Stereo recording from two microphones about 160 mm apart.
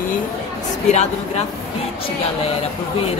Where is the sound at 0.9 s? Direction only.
45° left (ahead or behind).